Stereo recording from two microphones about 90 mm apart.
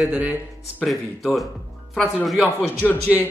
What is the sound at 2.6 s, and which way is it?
Speech, 25° left (ahead or behind).